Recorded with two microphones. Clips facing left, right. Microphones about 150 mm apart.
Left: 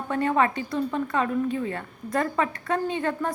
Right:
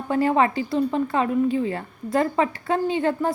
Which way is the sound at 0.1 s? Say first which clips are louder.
Right 3 dB; 30° right (ahead or behind).